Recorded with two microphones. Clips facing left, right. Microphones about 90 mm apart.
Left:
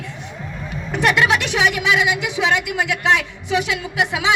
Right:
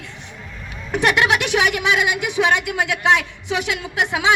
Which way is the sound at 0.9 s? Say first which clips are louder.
Even; 20° right (ahead or behind).